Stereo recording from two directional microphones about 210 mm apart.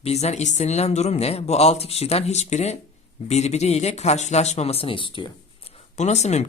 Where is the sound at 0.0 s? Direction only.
30° left (ahead or behind).